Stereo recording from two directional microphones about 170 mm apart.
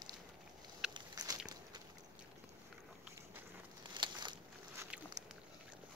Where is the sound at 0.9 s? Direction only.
20° right (ahead or behind).